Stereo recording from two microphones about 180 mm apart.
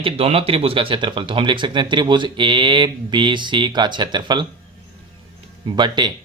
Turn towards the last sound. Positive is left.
turn(degrees=-25)  # may be behind; listen again after turning